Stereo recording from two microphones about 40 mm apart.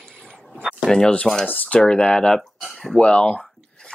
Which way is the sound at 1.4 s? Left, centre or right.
Left.